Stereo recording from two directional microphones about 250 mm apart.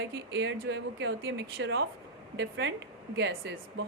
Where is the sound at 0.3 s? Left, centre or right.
Right.